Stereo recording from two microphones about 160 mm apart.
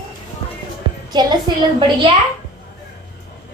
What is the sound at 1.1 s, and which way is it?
Speech, 25° right (ahead or behind).